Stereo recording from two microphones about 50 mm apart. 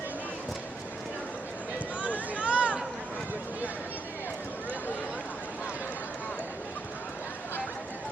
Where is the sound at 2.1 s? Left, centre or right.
Right.